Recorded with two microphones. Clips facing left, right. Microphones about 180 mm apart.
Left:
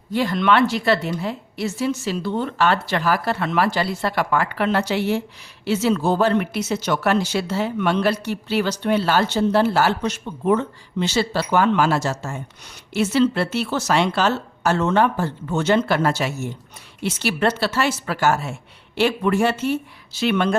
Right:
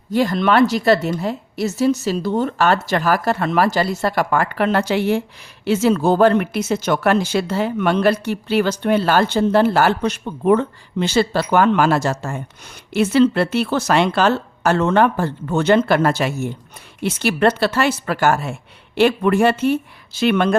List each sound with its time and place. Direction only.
0.1 s a woman's voice: 45° right (ahead or behind)